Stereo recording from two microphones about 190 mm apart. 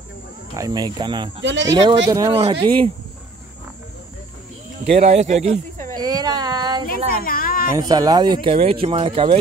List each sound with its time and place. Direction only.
0.6 s speech: 20° right (ahead or behind)
1.4 s speech: 70° right (ahead or behind)
1.7 s speech: 20° right (ahead or behind)
2.3 s speech: 30° right (ahead or behind)
4.8 s speech: 35° right (ahead or behind)
5.9 s a sound: 20° right (ahead or behind)
7.2 s a sound: 50° left (ahead or behind)
7.9 s speech: 20° right (ahead or behind)